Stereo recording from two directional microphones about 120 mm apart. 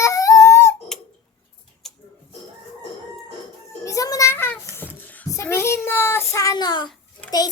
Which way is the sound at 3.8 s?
25° left (ahead or behind).